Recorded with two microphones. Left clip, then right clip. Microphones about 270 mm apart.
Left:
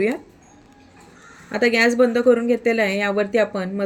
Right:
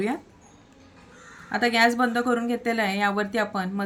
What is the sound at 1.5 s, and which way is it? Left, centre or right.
Speech, centre.